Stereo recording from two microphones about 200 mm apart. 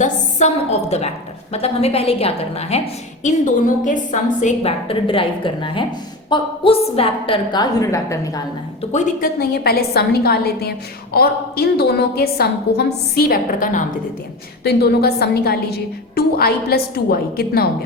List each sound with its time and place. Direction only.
0.0 s a sound: 35° left (ahead or behind)
0.9 s a woman's voice: 30° left (ahead or behind); by 8.4 s 15° left (ahead or behind)
8.9 s a woman's voice: 35° left (ahead or behind)
9.4 s a woman's voice: 50° left (ahead or behind)
14.6 s a woman's voice: 55° left (ahead or behind)